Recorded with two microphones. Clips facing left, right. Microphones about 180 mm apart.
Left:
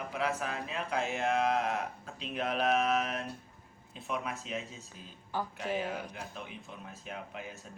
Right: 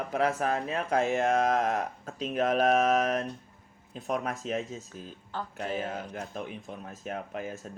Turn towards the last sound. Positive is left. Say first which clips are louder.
# right 7 dB
turn(degrees=-45)  # may be behind; listen again after turning